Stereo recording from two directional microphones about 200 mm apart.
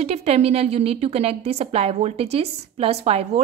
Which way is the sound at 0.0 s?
30° right (ahead or behind).